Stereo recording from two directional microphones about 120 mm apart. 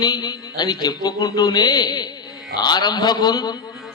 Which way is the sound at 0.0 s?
35° left (ahead or behind).